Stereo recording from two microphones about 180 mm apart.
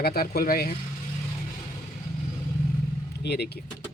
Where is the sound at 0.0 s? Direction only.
60° left (ahead or behind).